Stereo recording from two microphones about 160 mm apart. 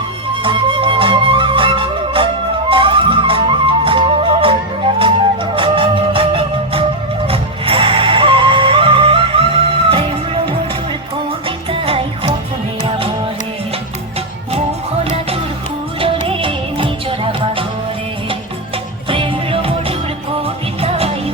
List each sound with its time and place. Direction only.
0.4 s flute: 30° right (ahead or behind)
4.9 s music: 35° right (ahead or behind)
16.2 s music: 35° right (ahead or behind)
19.0 s music: 30° right (ahead or behind)